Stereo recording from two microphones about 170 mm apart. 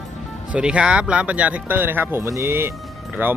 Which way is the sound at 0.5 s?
5° right (ahead or behind).